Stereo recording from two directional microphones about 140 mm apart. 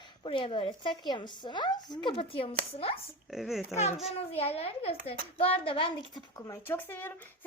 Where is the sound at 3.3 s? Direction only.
Centre (ahead or behind).